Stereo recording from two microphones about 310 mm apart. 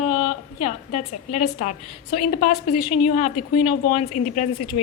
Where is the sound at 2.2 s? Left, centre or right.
Left.